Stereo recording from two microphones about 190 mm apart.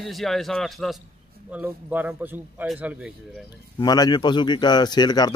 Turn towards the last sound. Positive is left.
turn(degrees=20)  # may be behind; listen again after turning